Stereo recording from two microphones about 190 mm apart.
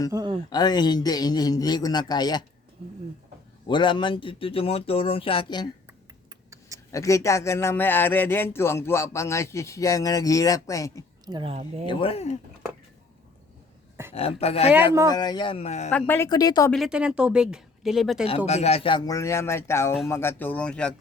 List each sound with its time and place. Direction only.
0.1 s speech: 25° right (ahead or behind)
0.5 s speech: 20° left (ahead or behind)
3.7 s speech: 25° left (ahead or behind)
6.9 s speech: 15° left (ahead or behind)
11.3 s speech: 25° right (ahead or behind)
11.9 s speech: 30° left (ahead or behind)
14.1 s speech: 30° left (ahead or behind)
15.1 s speech: 20° left (ahead or behind)
15.9 s speech: 10° left (ahead or behind)
16.7 s speech: 5° right (ahead or behind)
18.4 s speech: 35° left (ahead or behind); by 20.9 s 5° left (ahead or behind)